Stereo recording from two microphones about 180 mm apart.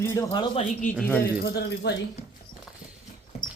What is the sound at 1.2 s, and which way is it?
Speech, 65° left (ahead or behind).